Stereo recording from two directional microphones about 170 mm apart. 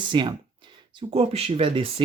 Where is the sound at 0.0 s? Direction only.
30° right (ahead or behind).